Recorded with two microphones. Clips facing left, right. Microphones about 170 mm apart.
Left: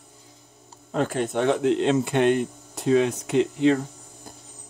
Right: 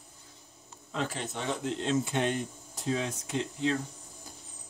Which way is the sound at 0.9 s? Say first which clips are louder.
Left 10 dB; 55° left (ahead or behind).